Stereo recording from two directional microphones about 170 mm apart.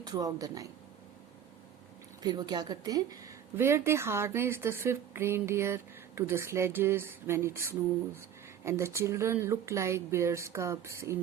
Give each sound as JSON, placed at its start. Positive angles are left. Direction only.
{"t": 0.0, "sound": "speech", "side_deg": -20}
{"t": 2.2, "sound": "speech", "side_deg": -25}